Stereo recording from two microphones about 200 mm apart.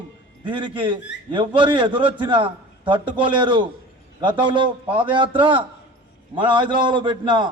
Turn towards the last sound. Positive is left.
turn(degrees=-20)  # may be behind; listen again after turning